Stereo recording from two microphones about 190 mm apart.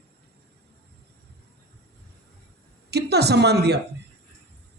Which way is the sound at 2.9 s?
60° right (ahead or behind).